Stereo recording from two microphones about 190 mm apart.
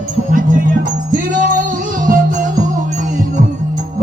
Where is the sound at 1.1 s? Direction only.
45° right (ahead or behind).